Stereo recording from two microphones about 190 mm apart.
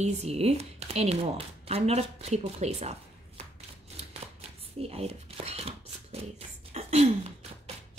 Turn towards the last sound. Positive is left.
turn(degrees=-35)  # may be behind; listen again after turning